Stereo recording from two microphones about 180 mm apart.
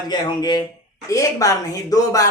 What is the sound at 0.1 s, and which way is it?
Speech, 25° left (ahead or behind).